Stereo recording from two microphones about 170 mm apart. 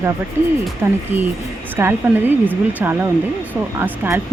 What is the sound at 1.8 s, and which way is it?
Speech, 15° right (ahead or behind).